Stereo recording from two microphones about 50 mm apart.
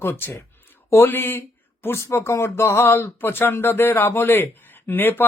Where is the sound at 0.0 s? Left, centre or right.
Left.